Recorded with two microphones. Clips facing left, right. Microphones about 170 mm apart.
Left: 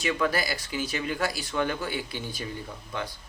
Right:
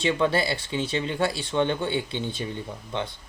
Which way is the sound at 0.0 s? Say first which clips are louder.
Right 4 dB; 25° right (ahead or behind).